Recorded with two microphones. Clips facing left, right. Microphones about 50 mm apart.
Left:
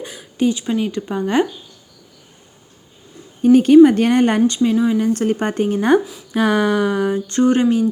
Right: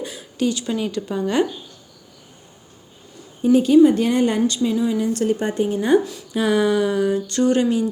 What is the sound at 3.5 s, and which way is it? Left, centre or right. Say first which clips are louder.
A woman's voice: left 4 dB; left.